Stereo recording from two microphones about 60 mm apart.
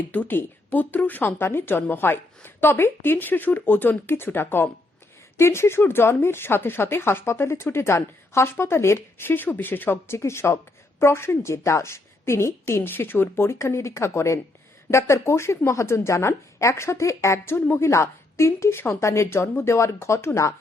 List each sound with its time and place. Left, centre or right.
0.1 s speech: left
10.2 s a woman's voice: left